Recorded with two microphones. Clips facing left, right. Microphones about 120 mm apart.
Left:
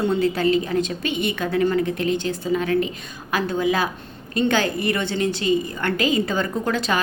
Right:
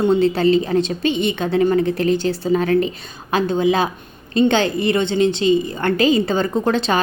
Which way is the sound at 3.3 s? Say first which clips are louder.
Right 4 dB; 25° right (ahead or behind).